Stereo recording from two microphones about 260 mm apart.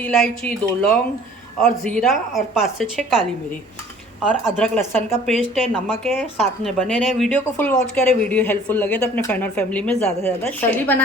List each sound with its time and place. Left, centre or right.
0.0 s a woman's voice: centre